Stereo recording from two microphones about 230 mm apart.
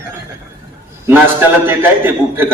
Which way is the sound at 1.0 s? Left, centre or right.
Centre.